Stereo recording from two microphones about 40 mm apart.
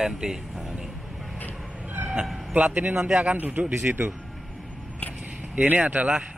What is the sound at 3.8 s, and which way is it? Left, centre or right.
Speech, right.